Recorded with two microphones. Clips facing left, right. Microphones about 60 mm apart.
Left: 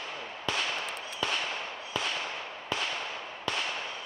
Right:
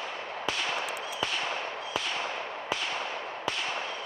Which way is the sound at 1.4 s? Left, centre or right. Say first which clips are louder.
Right 3 dB; right.